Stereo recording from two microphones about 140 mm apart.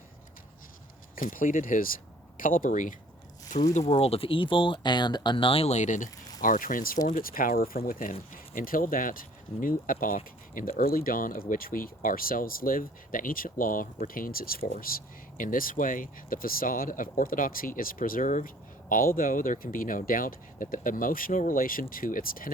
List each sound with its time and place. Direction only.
1.1 s speech: 75° left (ahead or behind)
3.8 s speech: 45° left (ahead or behind); by 6.1 s 60° left (ahead or behind)
6.4 s speech: 75° left (ahead or behind)
7.1 s speech: 90° left